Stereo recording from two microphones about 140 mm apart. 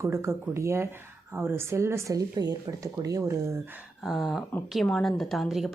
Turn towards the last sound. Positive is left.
turn(degrees=0)  # may be behind; listen again after turning